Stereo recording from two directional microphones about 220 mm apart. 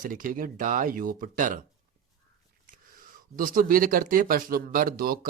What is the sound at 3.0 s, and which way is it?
Speech, 40° right (ahead or behind).